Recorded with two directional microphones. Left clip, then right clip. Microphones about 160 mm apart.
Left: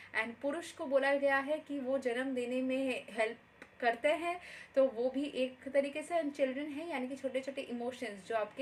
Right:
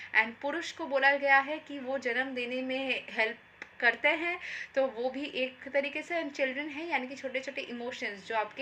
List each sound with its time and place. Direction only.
0.1 s a woman's voice: 15° left (ahead or behind)